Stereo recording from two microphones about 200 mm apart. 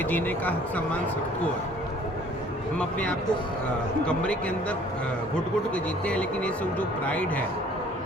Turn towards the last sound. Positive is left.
turn(degrees=5)  # may be behind; listen again after turning